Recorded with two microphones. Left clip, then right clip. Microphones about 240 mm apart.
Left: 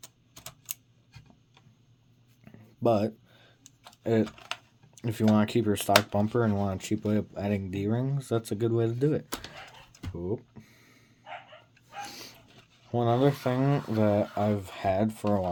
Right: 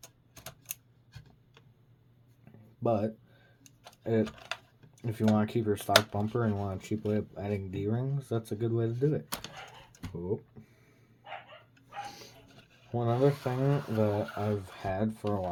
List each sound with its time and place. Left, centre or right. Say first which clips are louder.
0.0 s typewriter: left 1 dB; centre
2.4 s a sound: left 5 dB; left
4.9 s speech: left 3 dB; left
10.2 s cash register: left 1 dB; left
12.0 s a sound: left 2 dB; left
12.9 s speech: left 3 dB; left